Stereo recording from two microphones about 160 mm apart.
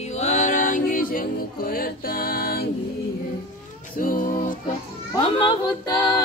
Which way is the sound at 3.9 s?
55° left (ahead or behind).